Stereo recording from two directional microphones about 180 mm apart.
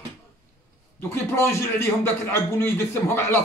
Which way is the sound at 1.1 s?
15° left (ahead or behind).